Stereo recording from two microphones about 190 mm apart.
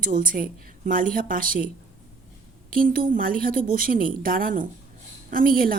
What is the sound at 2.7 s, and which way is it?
A woman's voice, 50° right (ahead or behind).